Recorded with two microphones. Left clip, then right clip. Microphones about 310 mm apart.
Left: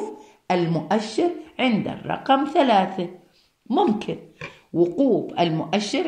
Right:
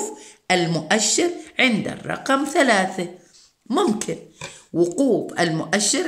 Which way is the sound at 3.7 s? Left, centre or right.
Right.